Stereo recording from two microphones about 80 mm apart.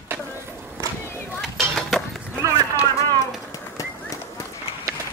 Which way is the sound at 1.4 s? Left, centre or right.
Centre.